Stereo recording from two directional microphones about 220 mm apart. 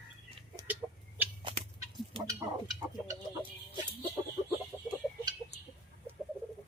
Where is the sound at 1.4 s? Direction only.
20° right (ahead or behind).